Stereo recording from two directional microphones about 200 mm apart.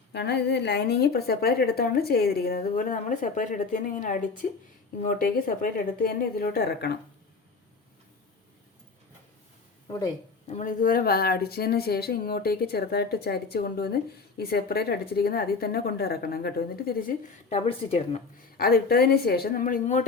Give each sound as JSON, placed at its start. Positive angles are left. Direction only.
{"t": 0.1, "sound": "speech", "side_deg": 55}
{"t": 10.4, "sound": "speech", "side_deg": 35}
{"t": 17.5, "sound": "speech", "side_deg": 30}
{"t": 18.5, "sound": "speech", "side_deg": 50}